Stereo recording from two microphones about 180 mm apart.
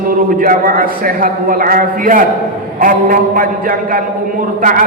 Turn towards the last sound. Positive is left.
turn(degrees=-45)  # may be behind; listen again after turning